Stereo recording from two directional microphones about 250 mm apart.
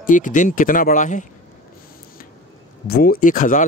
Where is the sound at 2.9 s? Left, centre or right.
Left.